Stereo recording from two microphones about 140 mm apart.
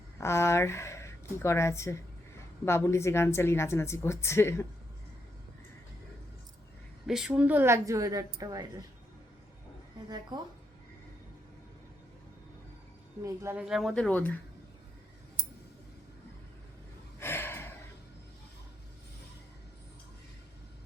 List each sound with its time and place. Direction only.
0.2 s a woman's voice: 20° left (ahead or behind)
7.1 s a woman's voice: 5° right (ahead or behind); by 8.6 s 25° right (ahead or behind)
10.0 s a woman's voice: 30° right (ahead or behind)
13.2 s speech: 20° right (ahead or behind)
13.6 s speech: centre (ahead or behind)
17.2 s gasp: 15° left (ahead or behind)